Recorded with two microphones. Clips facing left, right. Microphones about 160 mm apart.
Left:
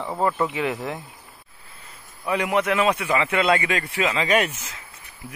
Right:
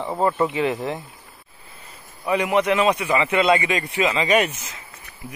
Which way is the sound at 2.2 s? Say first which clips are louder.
Right 3 dB; 10° right (ahead or behind).